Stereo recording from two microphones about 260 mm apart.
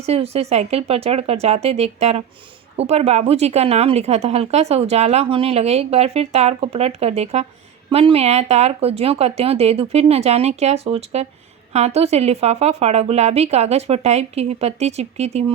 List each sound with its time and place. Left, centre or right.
0.0 s speech: right